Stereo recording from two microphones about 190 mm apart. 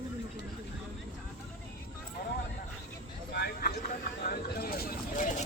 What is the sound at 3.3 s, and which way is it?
Vehicle, 55° left (ahead or behind).